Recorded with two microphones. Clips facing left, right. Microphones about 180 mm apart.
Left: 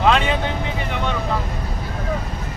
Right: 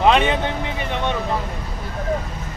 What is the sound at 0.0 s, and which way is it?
Vehicle, 20° right (ahead or behind).